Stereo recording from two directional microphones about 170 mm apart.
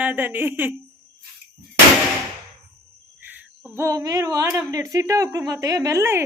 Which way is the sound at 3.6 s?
15° right (ahead or behind).